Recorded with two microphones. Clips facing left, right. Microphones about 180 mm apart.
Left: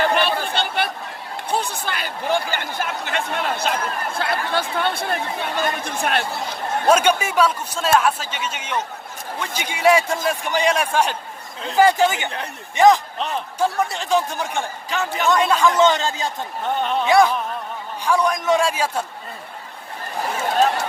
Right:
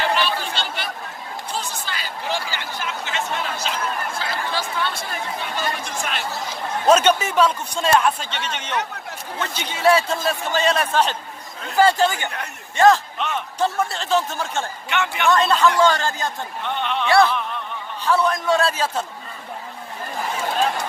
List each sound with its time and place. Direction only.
0.0 s chatter: 55° left (ahead or behind)
1.5 s a sound: 60° left (ahead or behind)
6.8 s a man's voice: 10° left (ahead or behind)
13.1 s a man's voice: 35° left (ahead or behind)
13.6 s a man's voice: 15° left (ahead or behind)
14.8 s speech: 35° left (ahead or behind)
15.3 s a man's voice: 10° left (ahead or behind)
16.6 s speech: 40° left (ahead or behind)
17.1 s a man's voice: 15° left (ahead or behind)